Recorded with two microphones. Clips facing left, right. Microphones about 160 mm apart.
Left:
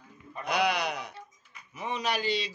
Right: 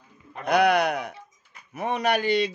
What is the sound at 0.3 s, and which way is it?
Mantra, 55° right (ahead or behind).